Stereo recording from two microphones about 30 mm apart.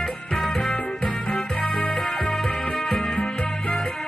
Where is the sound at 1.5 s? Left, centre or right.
Left.